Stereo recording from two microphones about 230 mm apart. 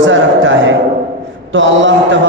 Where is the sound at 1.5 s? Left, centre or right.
Right.